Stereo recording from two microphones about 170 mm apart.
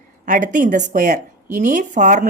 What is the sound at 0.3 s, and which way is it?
Speech, 50° right (ahead or behind).